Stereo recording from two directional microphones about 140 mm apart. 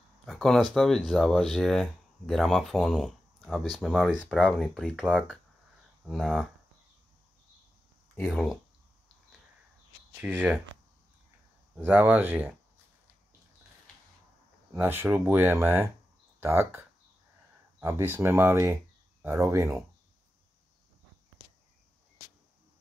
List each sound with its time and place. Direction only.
0.3 s speech: centre (ahead or behind)
6.0 s speech: centre (ahead or behind)
8.2 s speech: 5° left (ahead or behind)
10.1 s speech: 10° right (ahead or behind)
11.7 s speech: 10° right (ahead or behind)
14.7 s speech: 15° right (ahead or behind)